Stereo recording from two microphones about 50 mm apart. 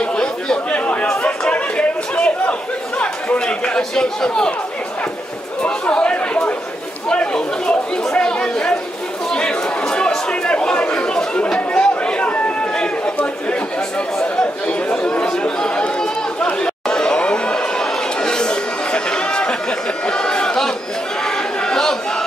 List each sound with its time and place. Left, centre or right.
0.0 s chatter: centre
4.0 s a man's voice: centre
5.6 s chatter: left
14.2 s speech: left
16.6 s a sound: centre